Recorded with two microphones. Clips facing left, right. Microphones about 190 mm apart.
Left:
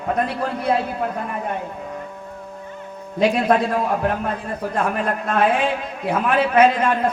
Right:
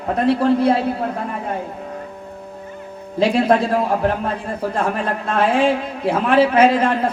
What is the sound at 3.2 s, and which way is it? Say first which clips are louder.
A man's voice: right 2 dB; 30° right (ahead or behind).